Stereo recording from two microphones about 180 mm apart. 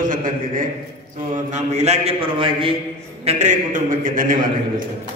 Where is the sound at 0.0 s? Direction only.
50° right (ahead or behind).